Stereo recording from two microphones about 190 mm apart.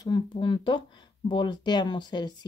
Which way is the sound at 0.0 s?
25° left (ahead or behind).